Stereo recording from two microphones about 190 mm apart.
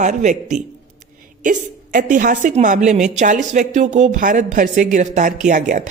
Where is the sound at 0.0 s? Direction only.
40° right (ahead or behind).